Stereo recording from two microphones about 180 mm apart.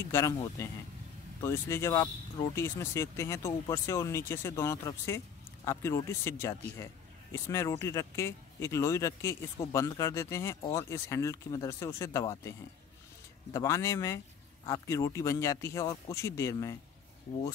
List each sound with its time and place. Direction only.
0.0 s speech: 15° left (ahead or behind)